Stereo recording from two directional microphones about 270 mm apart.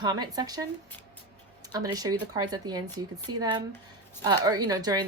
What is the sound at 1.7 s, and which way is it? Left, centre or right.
Speech, centre.